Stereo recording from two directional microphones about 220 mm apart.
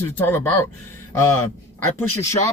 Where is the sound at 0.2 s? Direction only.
10° left (ahead or behind).